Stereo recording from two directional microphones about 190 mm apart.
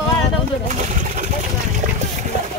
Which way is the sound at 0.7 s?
40° right (ahead or behind).